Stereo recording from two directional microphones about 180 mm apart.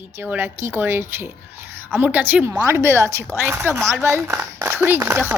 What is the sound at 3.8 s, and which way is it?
Speech, centre (ahead or behind).